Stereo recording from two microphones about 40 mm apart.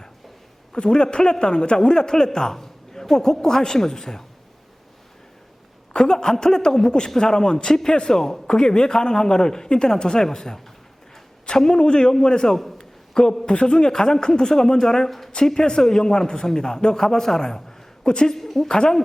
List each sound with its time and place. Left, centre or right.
0.7 s a man's voice: left
5.9 s a man's voice: centre
18.3 s a woman's voice: centre
18.7 s a man's voice: centre